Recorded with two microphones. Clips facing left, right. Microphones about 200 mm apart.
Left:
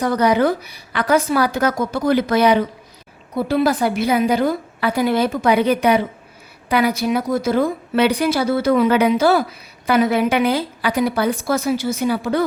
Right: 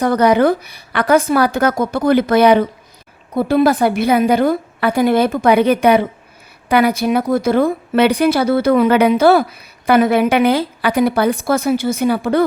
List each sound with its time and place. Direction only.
0.0 s a woman's voice: 55° right (ahead or behind)